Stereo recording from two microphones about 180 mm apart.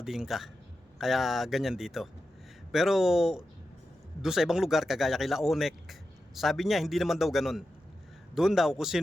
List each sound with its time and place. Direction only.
0.0 s speech: centre (ahead or behind)